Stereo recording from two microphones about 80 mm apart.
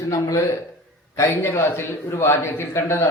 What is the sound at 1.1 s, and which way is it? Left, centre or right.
A man's voice, left.